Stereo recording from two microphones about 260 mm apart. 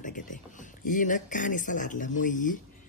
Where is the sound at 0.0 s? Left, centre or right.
Left.